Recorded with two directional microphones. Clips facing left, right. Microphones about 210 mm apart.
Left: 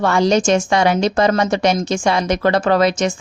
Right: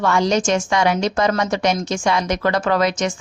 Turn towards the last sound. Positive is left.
turn(degrees=30)  # may be behind; listen again after turning